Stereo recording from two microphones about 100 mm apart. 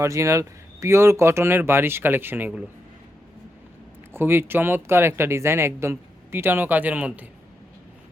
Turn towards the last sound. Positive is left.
turn(degrees=-15)  # may be behind; listen again after turning